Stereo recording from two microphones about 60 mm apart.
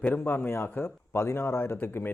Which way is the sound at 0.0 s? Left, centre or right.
Left.